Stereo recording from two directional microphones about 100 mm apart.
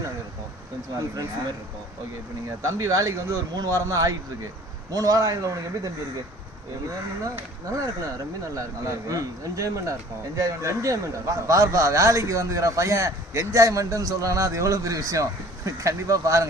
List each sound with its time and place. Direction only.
2.6 s a man's voice: 30° right (ahead or behind)
7.3 s a man's voice: 35° right (ahead or behind)